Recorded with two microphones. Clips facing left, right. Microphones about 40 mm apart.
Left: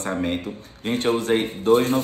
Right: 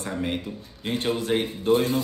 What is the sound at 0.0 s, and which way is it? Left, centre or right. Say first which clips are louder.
A man's voice: left 4 dB; left.